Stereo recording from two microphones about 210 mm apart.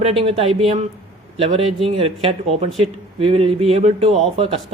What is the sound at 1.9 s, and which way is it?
Speech, 25° right (ahead or behind).